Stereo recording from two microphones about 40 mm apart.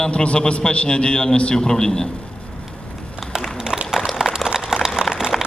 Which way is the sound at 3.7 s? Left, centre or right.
Centre.